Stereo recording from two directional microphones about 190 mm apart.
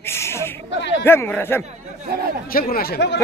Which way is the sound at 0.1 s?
15° left (ahead or behind).